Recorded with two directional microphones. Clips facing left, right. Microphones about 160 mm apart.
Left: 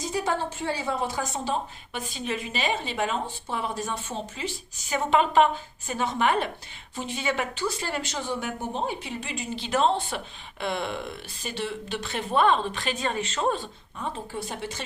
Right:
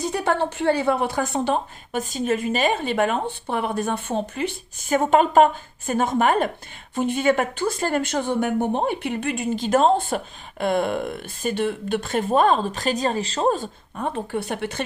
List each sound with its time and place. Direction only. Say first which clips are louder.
0.0 s speech: right 5 dB; 60° right (ahead or behind); by 13.7 s 40° right (ahead or behind)
13.9 s speech: right 7 dB; 60° right (ahead or behind)